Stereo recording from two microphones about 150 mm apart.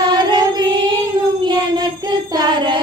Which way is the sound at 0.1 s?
30° right (ahead or behind).